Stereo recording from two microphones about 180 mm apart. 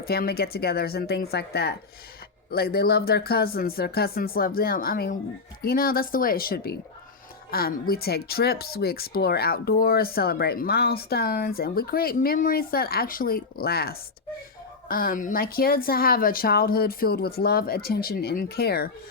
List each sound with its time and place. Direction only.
0.0 s speech: 60° left (ahead or behind)